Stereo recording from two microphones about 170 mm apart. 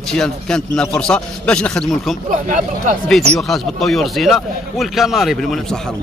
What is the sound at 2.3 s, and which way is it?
Speech, 50° right (ahead or behind).